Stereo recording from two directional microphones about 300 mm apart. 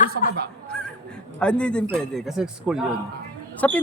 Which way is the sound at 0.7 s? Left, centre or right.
Centre.